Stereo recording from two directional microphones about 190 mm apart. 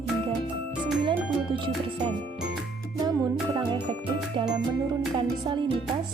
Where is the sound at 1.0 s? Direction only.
25° right (ahead or behind).